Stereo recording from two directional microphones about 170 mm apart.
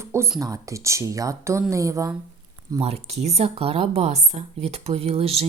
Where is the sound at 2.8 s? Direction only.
35° right (ahead or behind).